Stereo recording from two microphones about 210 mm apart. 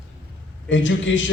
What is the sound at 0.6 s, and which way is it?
Speech, 60° left (ahead or behind).